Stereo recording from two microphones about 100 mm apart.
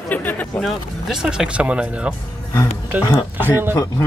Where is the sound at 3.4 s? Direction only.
20° right (ahead or behind).